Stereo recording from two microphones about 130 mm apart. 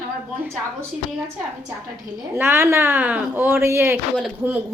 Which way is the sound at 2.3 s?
20° right (ahead or behind).